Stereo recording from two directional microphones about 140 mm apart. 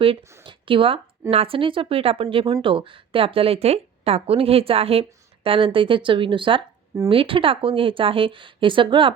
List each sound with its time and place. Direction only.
0.0 s speech: 40° right (ahead or behind)